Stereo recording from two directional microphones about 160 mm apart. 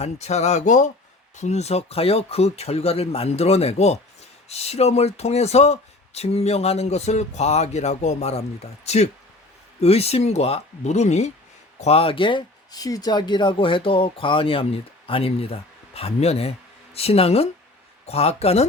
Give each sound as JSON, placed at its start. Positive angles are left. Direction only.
{"t": 0.0, "sound": "speech", "side_deg": 45}